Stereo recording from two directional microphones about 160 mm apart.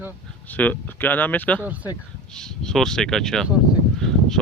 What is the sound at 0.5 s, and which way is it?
Speech, 10° left (ahead or behind).